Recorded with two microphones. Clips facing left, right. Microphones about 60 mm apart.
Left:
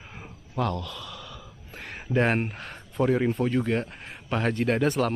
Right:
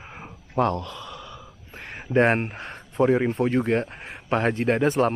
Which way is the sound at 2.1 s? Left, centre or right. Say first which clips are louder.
Right 4 dB; right.